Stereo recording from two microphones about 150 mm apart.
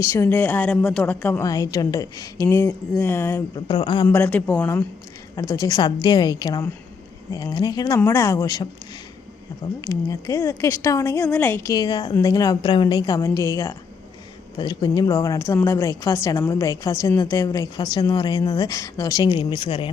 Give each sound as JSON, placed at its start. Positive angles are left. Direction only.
{"t": 0.0, "sound": "a woman's voice", "side_deg": 15}
{"t": 1.5, "sound": "a woman's voice", "side_deg": 25}
{"t": 3.5, "sound": "a woman's voice", "side_deg": 30}
{"t": 4.1, "sound": "a woman's voice", "side_deg": 10}
{"t": 9.8, "sound": "a woman's voice", "side_deg": 20}
{"t": 19.4, "sound": "speech", "side_deg": 35}